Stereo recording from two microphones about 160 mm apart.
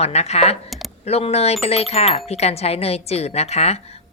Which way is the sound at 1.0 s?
40° left (ahead or behind).